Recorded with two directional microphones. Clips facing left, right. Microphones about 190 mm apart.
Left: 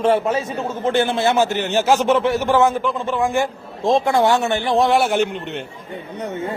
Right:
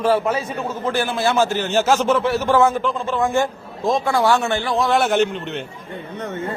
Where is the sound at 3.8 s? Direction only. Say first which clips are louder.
Left 3 dB; 25° left (ahead or behind); by 5.6 s 10° left (ahead or behind).